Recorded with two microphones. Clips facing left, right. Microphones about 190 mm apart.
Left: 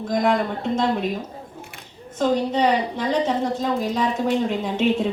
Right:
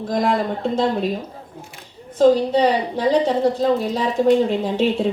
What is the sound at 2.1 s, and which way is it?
A woman's voice, 35° right (ahead or behind).